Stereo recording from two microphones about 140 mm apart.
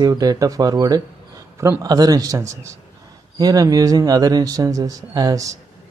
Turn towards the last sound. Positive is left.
turn(degrees=-25)  # may be behind; listen again after turning